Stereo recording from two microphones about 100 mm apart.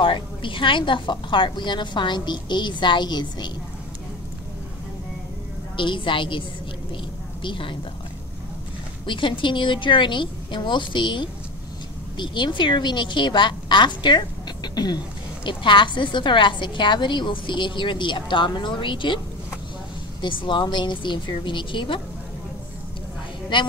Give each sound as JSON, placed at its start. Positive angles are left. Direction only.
{"t": 0.0, "sound": "a woman's voice", "side_deg": 55}
{"t": 5.8, "sound": "a woman's voice", "side_deg": 55}
{"t": 7.4, "sound": "a woman's voice", "side_deg": 60}
{"t": 9.0, "sound": "a woman's voice", "side_deg": 55}
{"t": 23.5, "sound": "a woman's voice", "side_deg": 55}